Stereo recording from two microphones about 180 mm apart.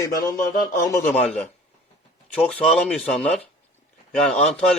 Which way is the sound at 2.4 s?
Centre (ahead or behind).